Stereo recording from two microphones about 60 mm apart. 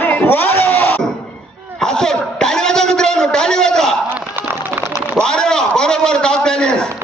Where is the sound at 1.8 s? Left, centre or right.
Centre.